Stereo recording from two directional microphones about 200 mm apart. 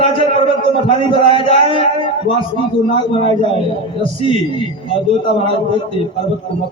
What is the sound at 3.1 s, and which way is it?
A man's voice, 25° left (ahead or behind).